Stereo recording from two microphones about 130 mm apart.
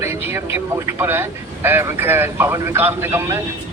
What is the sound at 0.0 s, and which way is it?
Speech, 20° right (ahead or behind).